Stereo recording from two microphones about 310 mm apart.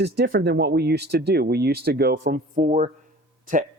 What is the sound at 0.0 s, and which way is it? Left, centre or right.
Speech, right.